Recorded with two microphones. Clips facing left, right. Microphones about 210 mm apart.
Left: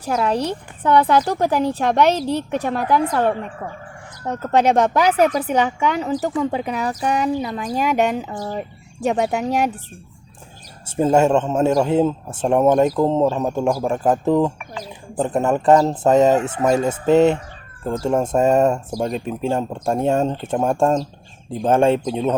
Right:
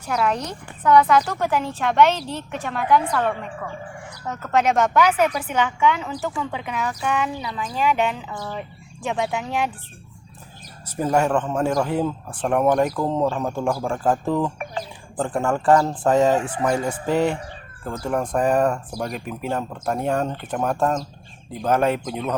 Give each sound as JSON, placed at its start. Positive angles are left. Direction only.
{"t": 0.0, "sound": "speech", "side_deg": 35}
{"t": 10.8, "sound": "a man's voice", "side_deg": 25}